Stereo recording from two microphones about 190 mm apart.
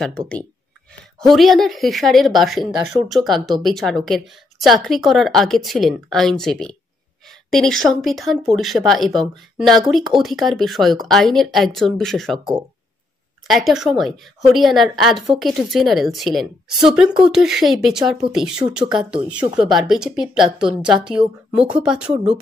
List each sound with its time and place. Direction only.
1.3 s a woman's voice: centre (ahead or behind)
13.5 s a woman's voice: centre (ahead or behind)
22.1 s speech: 35° right (ahead or behind)